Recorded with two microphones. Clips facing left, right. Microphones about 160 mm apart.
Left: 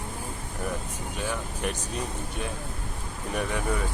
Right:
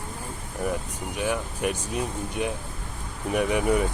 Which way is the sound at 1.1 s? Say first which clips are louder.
Right 5 dB; 15° right (ahead or behind).